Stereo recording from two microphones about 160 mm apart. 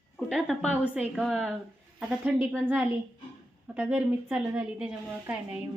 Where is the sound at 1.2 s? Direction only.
Centre (ahead or behind).